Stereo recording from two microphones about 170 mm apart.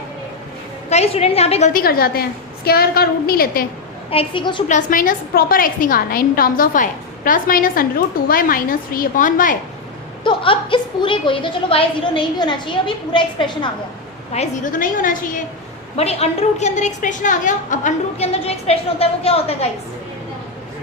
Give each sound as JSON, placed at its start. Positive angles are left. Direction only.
{"t": 0.9, "sound": "a woman's voice", "side_deg": 40}
{"t": 1.7, "sound": "a woman's voice", "side_deg": 60}
{"t": 4.1, "sound": "a woman's voice", "side_deg": 30}
{"t": 4.7, "sound": "a woman's voice", "side_deg": 50}
{"t": 10.2, "sound": "a woman's voice", "side_deg": 30}
{"t": 14.3, "sound": "a woman's voice", "side_deg": 45}
{"t": 16.0, "sound": "a woman's voice", "side_deg": 40}